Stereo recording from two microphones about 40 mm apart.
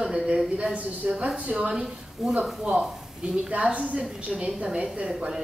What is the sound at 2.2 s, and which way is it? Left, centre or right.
Speech, centre.